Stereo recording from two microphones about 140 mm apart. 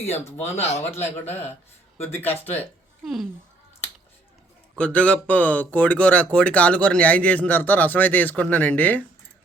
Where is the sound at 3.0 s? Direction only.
Centre (ahead or behind).